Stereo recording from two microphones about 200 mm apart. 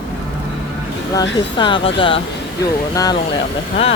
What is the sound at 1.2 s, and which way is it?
Speech, 25° left (ahead or behind).